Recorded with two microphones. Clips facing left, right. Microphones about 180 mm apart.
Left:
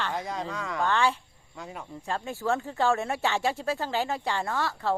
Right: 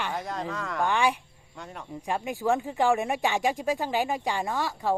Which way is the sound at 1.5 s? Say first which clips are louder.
Left 1 dB; centre (ahead or behind).